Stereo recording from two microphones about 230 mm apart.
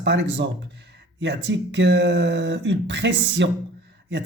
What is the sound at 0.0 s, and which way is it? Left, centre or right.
Speech, right.